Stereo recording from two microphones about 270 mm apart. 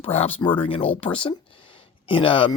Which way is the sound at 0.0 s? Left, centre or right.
Left.